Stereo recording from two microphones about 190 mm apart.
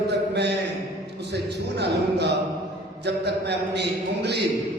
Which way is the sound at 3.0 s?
60° right (ahead or behind).